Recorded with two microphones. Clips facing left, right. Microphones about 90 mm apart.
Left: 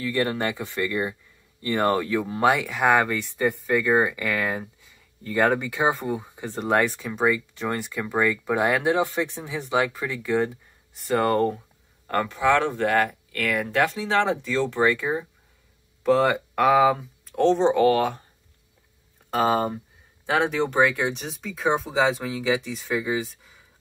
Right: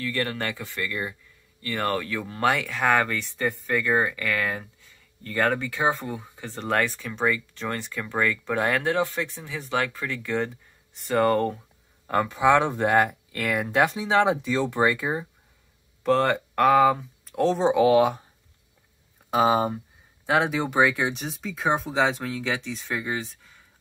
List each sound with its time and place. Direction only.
0.0 s speech: 20° left (ahead or behind); by 11.6 s centre (ahead or behind)
12.1 s speech: 10° right (ahead or behind)
19.3 s speech: 5° right (ahead or behind)